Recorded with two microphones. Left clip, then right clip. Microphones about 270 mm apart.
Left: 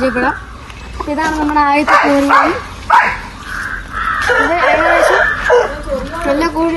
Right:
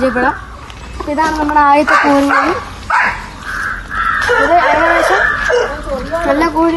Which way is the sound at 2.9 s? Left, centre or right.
Left.